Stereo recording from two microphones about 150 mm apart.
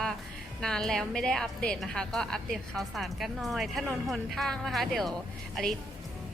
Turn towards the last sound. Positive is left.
turn(degrees=0)  # may be behind; listen again after turning